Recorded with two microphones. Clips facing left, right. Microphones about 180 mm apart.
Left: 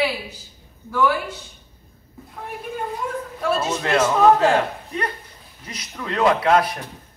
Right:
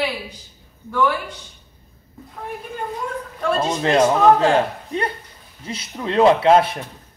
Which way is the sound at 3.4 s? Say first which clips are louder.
Right 2 dB; 5° left (ahead or behind).